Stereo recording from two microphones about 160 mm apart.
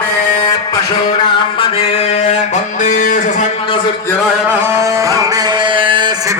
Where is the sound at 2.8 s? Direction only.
50° left (ahead or behind).